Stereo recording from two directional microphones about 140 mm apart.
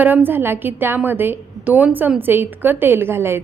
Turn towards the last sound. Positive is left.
turn(degrees=-15)  # may be behind; listen again after turning